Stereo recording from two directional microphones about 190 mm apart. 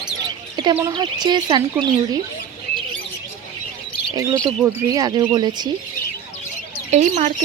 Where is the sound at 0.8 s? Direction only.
20° right (ahead or behind).